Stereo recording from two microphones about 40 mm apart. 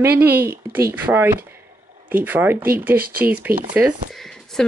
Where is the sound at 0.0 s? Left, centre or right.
Right.